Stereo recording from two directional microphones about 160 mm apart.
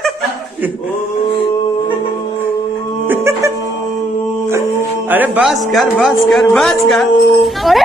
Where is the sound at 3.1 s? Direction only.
15° right (ahead or behind).